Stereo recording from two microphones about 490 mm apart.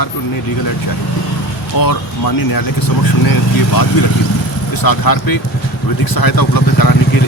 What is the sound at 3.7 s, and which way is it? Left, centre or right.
Speech, left.